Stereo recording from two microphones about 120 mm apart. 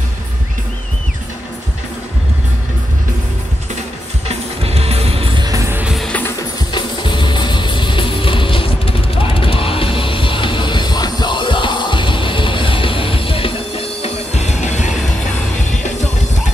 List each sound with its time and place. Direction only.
4.3 s music: 55° right (ahead or behind)
5.7 s music: 15° right (ahead or behind)
5.9 s music: 5° left (ahead or behind)
6.7 s music: 40° left (ahead or behind); by 14.9 s 75° left (ahead or behind)